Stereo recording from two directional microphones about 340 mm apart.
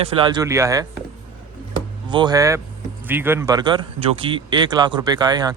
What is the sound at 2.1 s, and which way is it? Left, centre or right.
Speech, centre.